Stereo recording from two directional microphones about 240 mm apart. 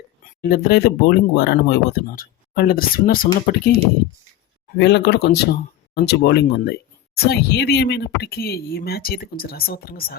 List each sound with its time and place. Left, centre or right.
0.4 s speech: left
4.8 s speech: left